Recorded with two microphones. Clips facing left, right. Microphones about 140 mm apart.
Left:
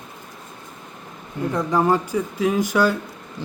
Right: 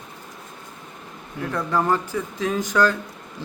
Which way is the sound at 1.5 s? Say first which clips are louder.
Left 3 dB; 15° left (ahead or behind).